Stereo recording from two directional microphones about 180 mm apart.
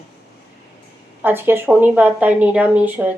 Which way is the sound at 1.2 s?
10° right (ahead or behind).